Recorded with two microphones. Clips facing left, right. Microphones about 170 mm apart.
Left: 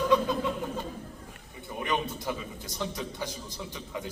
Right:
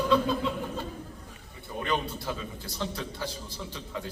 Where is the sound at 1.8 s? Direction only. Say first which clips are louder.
Even; 15° left (ahead or behind).